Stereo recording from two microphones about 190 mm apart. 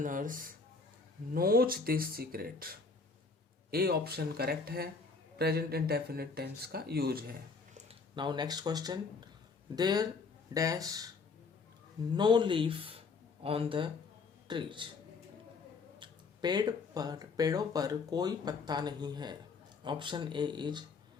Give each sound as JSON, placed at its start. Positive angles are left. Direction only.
{"t": 0.0, "sound": "speech", "side_deg": -45}
{"t": 7.9, "sound": "speech", "side_deg": -25}
{"t": 12.1, "sound": "a man's voice", "side_deg": -25}
{"t": 16.0, "sound": "speech", "side_deg": -20}